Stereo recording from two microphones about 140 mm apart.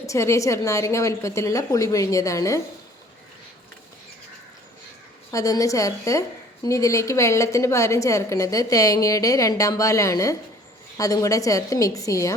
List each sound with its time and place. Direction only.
0.0 s a woman's voice: 20° left (ahead or behind)
5.3 s a woman's voice: 25° left (ahead or behind)